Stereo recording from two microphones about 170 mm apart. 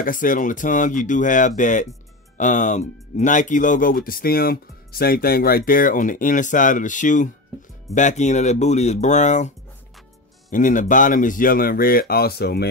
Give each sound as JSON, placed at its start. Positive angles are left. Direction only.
{"t": 0.0, "sound": "speech", "side_deg": 50}
{"t": 10.5, "sound": "speech", "side_deg": 50}